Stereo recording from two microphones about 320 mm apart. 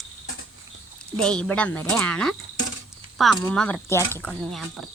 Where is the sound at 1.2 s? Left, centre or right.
Centre.